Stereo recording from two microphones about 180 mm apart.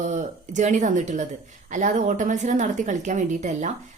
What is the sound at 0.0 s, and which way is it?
A woman's voice, 45° right (ahead or behind).